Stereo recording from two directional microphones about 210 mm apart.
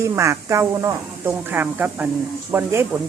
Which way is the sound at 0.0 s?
15° right (ahead or behind).